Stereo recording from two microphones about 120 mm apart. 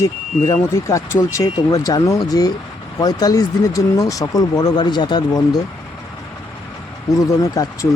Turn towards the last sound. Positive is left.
turn(degrees=30)  # may be behind; listen again after turning